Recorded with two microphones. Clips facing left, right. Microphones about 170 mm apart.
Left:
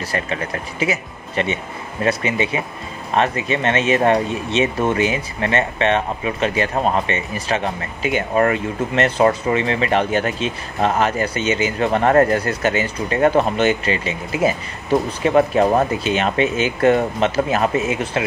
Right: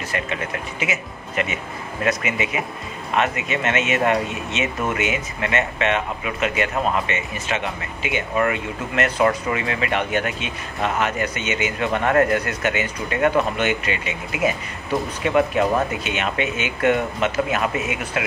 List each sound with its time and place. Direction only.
0.1 s speech: 35° left (ahead or behind)